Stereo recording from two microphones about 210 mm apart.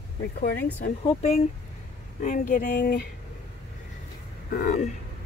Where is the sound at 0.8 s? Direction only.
35° left (ahead or behind).